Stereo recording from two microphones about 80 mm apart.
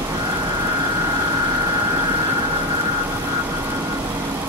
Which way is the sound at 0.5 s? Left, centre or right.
Right.